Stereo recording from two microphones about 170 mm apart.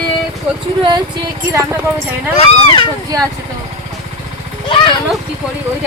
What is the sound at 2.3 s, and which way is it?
Speech, 35° left (ahead or behind).